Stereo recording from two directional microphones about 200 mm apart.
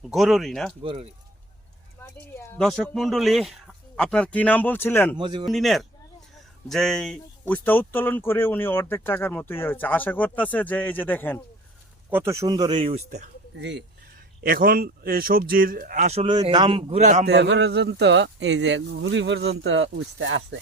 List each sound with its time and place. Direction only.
0.0 s speech: centre (ahead or behind)
0.8 s speech: 25° right (ahead or behind)
2.0 s speech: 10° left (ahead or behind)
5.1 s speech: 25° right (ahead or behind)
5.5 s speech: centre (ahead or behind)
12.1 s speech: 15° right (ahead or behind)
13.1 s speech: 40° right (ahead or behind)
13.6 s speech: 60° right (ahead or behind)
14.4 s a man's voice: 45° right (ahead or behind)
17.2 s speech: 60° right (ahead or behind)